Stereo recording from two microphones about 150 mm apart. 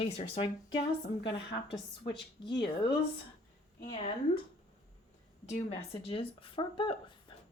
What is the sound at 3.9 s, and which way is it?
Speech, 40° left (ahead or behind).